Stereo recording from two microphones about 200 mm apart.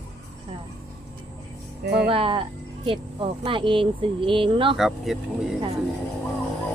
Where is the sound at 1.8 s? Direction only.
55° right (ahead or behind).